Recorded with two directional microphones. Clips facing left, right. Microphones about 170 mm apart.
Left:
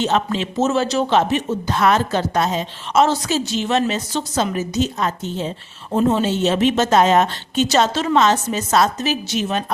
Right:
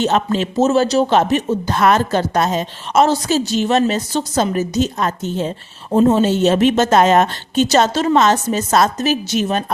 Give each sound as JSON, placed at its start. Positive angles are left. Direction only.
{"t": 0.0, "sound": "speech", "side_deg": -45}
{"t": 5.9, "sound": "speech", "side_deg": -40}